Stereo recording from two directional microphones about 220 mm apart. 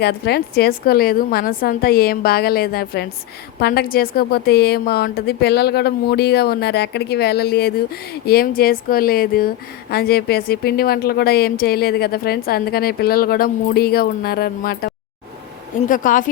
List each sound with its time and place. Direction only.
0.0 s a woman's voice: 45° left (ahead or behind)